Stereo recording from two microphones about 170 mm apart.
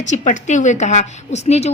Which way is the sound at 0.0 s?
45° left (ahead or behind).